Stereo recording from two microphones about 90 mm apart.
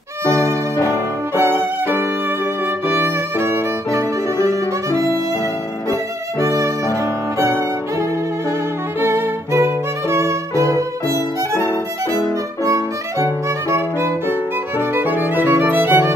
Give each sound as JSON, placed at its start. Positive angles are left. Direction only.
{"t": 1.3, "sound": "violin", "side_deg": -25}
{"t": 6.5, "sound": "music", "side_deg": -35}
{"t": 9.0, "sound": "violin", "side_deg": -25}
{"t": 13.2, "sound": "violin", "side_deg": -30}
{"t": 15.0, "sound": "music", "side_deg": -20}